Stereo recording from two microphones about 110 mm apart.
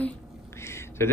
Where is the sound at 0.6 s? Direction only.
25° left (ahead or behind).